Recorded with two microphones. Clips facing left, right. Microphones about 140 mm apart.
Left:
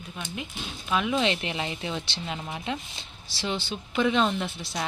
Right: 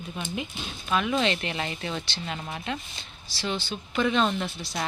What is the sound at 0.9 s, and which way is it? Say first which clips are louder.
Speech: even; 10° left (ahead or behind).